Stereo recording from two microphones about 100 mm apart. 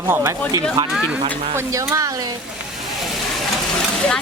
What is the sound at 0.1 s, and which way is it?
Speech, 30° right (ahead or behind).